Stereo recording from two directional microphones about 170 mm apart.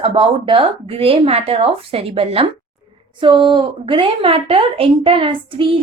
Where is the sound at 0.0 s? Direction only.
30° right (ahead or behind).